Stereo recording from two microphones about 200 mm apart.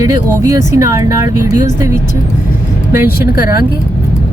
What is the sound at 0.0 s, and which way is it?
Speech, 15° right (ahead or behind).